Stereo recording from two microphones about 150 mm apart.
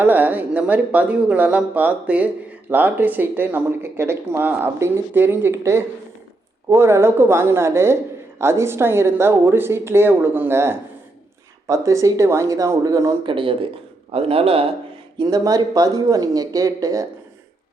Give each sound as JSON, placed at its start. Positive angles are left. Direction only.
{"t": 0.0, "sound": "speech", "side_deg": -10}
{"t": 13.2, "sound": "speech", "side_deg": -35}
{"t": 15.2, "sound": "speech", "side_deg": -25}